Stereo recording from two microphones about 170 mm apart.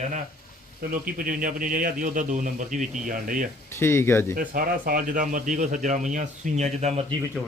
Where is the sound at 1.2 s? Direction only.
55° right (ahead or behind).